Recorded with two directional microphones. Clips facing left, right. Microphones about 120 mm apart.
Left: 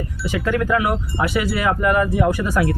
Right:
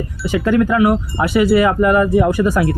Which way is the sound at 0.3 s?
30° right (ahead or behind).